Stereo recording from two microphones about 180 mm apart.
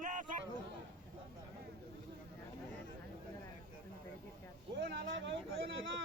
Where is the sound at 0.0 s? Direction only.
45° right (ahead or behind).